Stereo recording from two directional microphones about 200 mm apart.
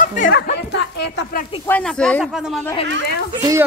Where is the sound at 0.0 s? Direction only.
40° left (ahead or behind).